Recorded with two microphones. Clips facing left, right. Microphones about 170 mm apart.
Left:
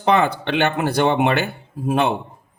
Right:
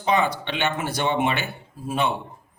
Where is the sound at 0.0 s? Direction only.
60° left (ahead or behind).